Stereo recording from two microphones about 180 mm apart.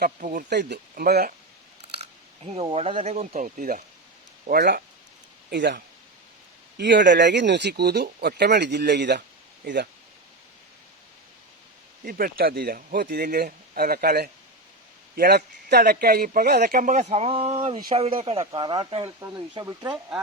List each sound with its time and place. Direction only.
0.0 s speech: 45° right (ahead or behind)
0.5 s speech: 70° right (ahead or behind)
2.4 s speech: 30° right (ahead or behind); by 4.8 s 55° right (ahead or behind)
5.5 s speech: 70° right (ahead or behind)
12.0 s speech: 55° right (ahead or behind); by 19.1 s 25° right (ahead or behind)
19.6 s speech: 10° right (ahead or behind)